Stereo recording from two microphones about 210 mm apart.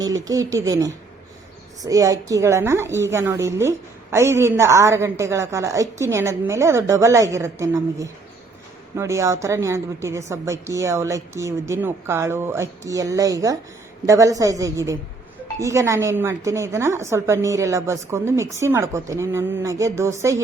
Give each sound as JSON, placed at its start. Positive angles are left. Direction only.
{"t": 0.0, "sound": "a woman's voice", "side_deg": -15}